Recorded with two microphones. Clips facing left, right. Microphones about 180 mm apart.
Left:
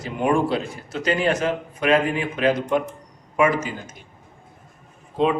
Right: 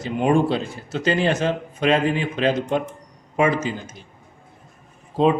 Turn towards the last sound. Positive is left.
turn(degrees=-35)  # may be behind; listen again after turning